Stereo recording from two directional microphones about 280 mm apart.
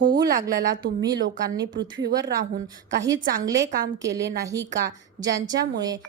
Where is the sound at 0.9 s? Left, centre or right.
Right.